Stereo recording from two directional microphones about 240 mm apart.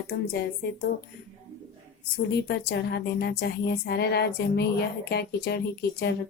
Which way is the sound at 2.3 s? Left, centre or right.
Left.